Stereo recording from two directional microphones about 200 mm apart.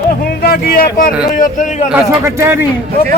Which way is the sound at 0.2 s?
50° left (ahead or behind).